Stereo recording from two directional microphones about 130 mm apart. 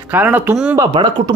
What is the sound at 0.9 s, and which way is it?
Speech, 35° right (ahead or behind).